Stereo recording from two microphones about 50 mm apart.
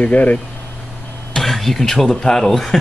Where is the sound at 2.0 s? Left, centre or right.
Centre.